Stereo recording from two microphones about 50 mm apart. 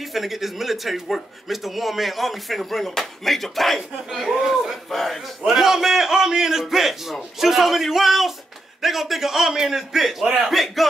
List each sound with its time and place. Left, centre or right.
0.0 s speech: centre
4.1 s speech: centre
10.2 s speech: centre
10.5 s speech: centre